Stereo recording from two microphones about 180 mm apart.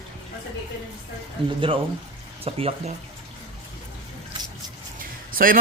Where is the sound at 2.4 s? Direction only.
35° right (ahead or behind).